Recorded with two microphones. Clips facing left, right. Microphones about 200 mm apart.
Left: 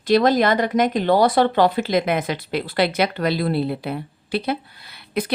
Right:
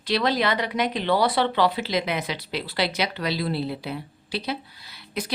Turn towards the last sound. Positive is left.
turn(degrees=55)  # may be behind; listen again after turning